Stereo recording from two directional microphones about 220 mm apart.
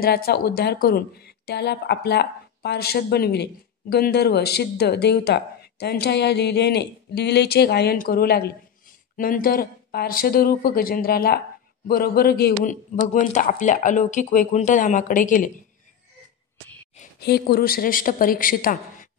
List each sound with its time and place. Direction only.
0.0 s a man's voice: 45° left (ahead or behind)
17.2 s a man's voice: 45° left (ahead or behind)